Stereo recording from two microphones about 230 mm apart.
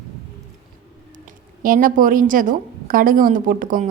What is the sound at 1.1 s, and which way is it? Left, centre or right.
Speech, right.